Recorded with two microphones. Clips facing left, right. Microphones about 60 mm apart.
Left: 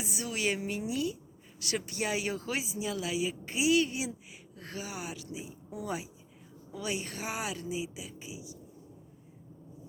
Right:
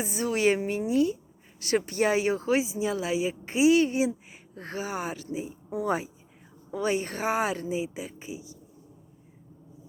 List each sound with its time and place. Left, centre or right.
0.0 s a woman's voice: right